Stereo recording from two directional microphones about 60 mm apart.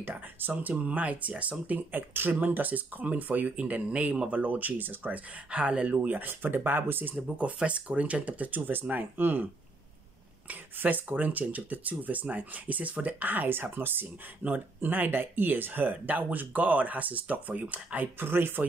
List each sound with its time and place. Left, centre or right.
0.0 s speech: right
5.9 s speech: right
7.2 s speech: right
10.5 s speech: right